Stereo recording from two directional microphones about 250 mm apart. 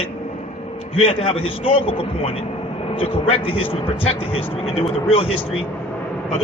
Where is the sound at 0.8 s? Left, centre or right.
Left.